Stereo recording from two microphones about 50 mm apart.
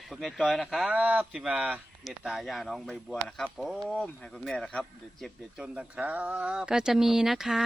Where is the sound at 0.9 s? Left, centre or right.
Right.